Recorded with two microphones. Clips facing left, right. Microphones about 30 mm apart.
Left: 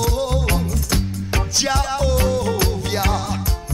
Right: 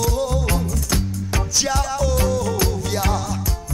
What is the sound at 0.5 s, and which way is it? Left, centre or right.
Music, centre.